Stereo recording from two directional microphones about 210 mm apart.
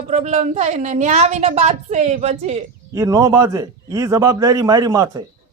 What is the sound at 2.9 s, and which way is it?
A man's voice, 15° right (ahead or behind).